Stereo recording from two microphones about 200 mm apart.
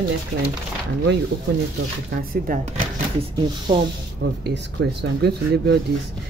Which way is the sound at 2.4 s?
40° right (ahead or behind).